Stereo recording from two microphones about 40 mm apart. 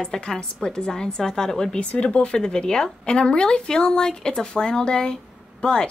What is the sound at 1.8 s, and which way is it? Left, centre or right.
A woman's voice, left.